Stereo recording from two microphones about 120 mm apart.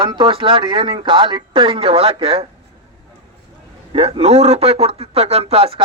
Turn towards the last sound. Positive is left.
turn(degrees=-50)  # may be behind; listen again after turning